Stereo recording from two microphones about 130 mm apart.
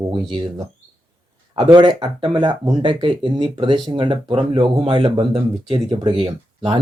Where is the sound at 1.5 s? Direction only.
35° right (ahead or behind).